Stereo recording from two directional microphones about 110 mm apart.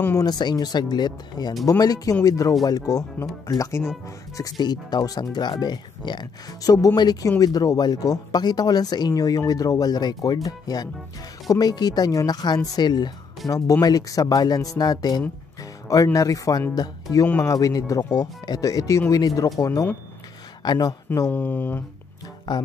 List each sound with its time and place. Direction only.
0.2 s speech: 40° left (ahead or behind)
4.4 s speech: 40° left (ahead or behind)
20.6 s speech: 40° left (ahead or behind)
21.3 s speech: 15° left (ahead or behind)
22.5 s speech: 40° left (ahead or behind)